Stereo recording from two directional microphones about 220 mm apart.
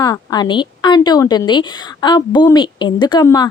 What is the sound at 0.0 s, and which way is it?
Speech, 15° left (ahead or behind).